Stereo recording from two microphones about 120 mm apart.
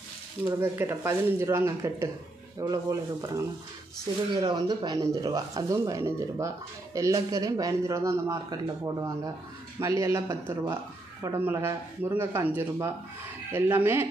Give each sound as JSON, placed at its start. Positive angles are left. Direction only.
{"t": 0.6, "sound": "speech", "side_deg": -20}